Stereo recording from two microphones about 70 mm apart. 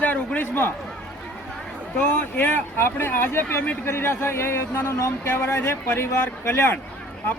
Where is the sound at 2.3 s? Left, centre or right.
Left.